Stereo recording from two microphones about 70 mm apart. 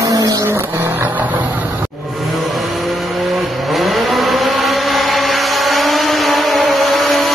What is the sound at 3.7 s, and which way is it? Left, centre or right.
Vehicle, centre.